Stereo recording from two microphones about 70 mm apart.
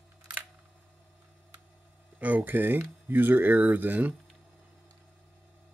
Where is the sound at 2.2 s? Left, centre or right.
Right.